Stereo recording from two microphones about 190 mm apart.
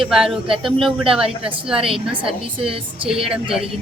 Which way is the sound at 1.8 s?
30° right (ahead or behind).